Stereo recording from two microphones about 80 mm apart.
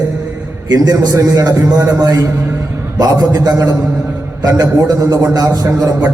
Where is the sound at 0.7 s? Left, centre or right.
Right.